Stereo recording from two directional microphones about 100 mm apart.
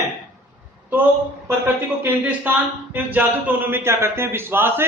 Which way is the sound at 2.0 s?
20° right (ahead or behind).